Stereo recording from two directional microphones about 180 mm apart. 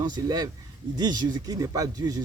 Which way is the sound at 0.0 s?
25° right (ahead or behind).